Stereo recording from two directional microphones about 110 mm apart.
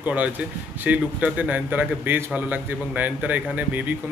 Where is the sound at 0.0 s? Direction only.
15° right (ahead or behind).